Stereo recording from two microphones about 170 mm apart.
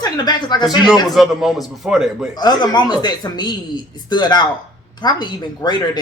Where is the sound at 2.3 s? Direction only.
25° left (ahead or behind).